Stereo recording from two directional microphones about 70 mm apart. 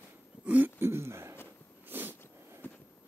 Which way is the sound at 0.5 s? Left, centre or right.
Right.